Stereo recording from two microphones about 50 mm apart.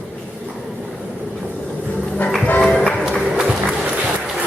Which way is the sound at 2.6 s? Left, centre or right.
Centre.